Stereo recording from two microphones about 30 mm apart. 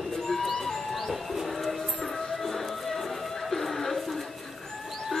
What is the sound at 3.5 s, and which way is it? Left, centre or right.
Chuckle, centre.